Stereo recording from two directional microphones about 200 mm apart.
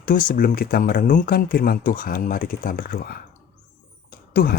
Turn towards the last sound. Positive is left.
turn(degrees=45)  # may be behind; listen again after turning